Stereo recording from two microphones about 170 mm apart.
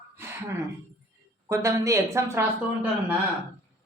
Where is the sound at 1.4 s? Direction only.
15° right (ahead or behind).